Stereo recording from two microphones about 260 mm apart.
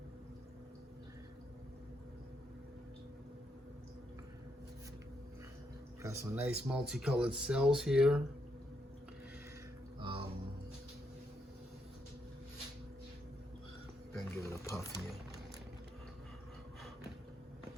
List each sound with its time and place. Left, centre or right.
6.0 s speech: centre
10.0 s music: centre
14.1 s music: centre